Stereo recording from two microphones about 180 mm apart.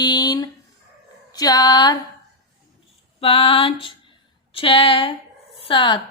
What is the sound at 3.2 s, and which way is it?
Music, 30° left (ahead or behind).